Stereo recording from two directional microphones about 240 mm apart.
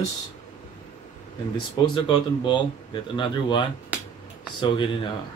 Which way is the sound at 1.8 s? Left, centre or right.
Centre.